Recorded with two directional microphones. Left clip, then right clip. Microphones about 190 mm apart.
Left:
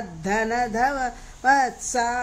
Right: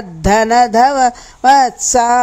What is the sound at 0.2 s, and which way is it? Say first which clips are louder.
Speech: right 13 dB; 45° right (ahead or behind).